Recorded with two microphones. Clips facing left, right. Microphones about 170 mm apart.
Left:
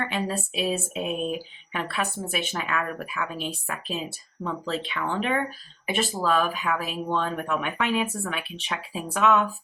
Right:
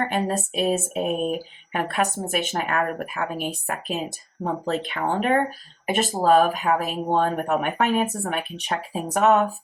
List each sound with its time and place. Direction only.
0.0 s speech: 45° right (ahead or behind)